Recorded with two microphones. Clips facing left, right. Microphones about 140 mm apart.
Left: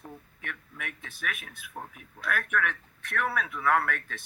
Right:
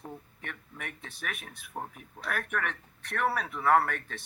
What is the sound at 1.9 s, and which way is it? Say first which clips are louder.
Speech: left 3 dB; 35° right (ahead or behind).